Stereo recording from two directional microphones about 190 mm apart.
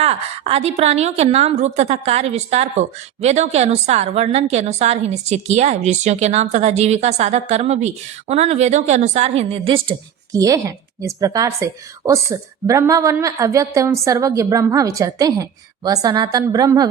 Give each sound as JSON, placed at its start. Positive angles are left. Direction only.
{"t": 0.0, "sound": "a woman's voice", "side_deg": -35}
{"t": 10.3, "sound": "a woman's voice", "side_deg": -15}